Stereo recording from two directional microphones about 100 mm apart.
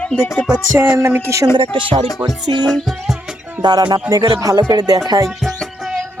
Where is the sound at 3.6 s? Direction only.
40° right (ahead or behind).